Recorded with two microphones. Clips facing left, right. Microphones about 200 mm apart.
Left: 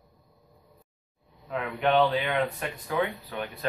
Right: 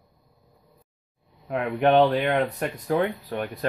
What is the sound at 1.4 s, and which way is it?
Speech, 55° right (ahead or behind).